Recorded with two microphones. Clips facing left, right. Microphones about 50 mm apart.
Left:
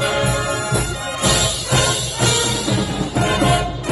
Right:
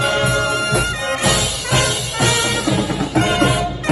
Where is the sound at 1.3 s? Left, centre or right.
Right.